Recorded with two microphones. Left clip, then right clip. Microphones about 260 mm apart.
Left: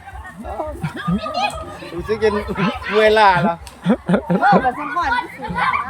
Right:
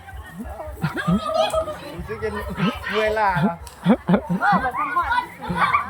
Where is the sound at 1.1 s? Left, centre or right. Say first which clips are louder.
Right 2 dB; centre.